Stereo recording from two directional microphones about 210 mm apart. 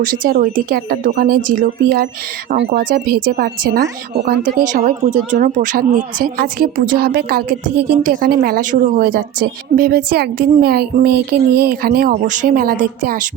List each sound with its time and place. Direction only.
0.0 s speech: 40° right (ahead or behind)